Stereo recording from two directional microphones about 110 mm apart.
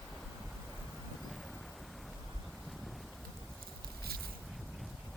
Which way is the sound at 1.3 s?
Centre (ahead or behind).